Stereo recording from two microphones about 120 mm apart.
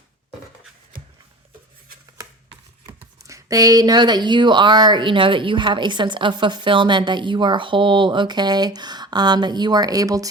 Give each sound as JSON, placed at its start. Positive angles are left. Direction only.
{"t": 2.8, "sound": "speech", "side_deg": -25}